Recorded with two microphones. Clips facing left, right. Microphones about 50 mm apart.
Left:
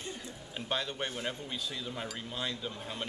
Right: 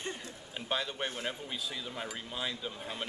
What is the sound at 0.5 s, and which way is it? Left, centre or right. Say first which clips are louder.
A man's voice: even; centre.